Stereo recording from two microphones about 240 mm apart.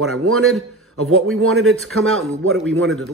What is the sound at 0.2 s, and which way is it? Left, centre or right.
Speech, right.